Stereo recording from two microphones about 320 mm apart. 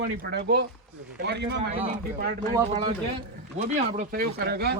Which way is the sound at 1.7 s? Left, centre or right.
Centre.